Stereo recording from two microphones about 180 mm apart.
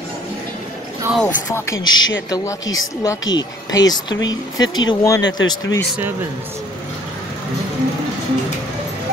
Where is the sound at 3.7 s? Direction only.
20° left (ahead or behind).